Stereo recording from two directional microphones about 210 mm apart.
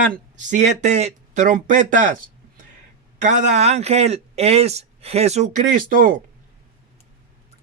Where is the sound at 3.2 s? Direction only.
35° right (ahead or behind).